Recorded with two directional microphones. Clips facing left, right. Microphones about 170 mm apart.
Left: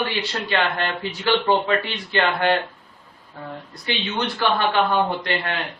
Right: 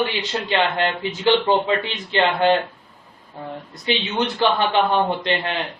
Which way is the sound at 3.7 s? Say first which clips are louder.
Right 4 dB; 20° right (ahead or behind).